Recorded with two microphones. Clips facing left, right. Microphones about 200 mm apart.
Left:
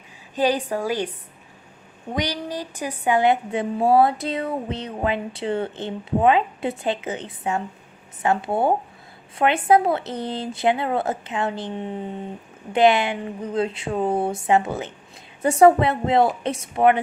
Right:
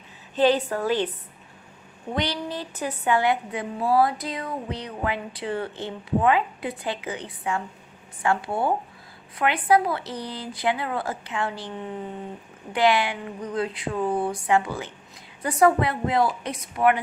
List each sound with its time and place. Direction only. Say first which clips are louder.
0.3 s a woman's voice: right 1 dB; 15° left (ahead or behind)
2.1 s a woman's voice: left 2 dB; 15° left (ahead or behind)